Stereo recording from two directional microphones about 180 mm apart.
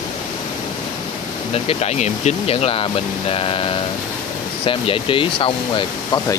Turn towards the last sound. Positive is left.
turn(degrees=30)  # may be behind; listen again after turning